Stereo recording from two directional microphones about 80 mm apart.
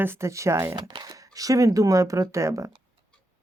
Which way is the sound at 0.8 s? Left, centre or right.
Right.